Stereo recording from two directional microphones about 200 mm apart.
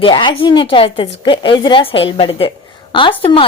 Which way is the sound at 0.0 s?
25° left (ahead or behind).